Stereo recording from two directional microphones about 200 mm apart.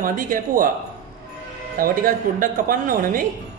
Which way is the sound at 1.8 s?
45° right (ahead or behind).